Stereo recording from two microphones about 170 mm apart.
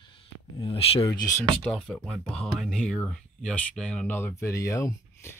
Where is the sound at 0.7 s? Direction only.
35° left (ahead or behind).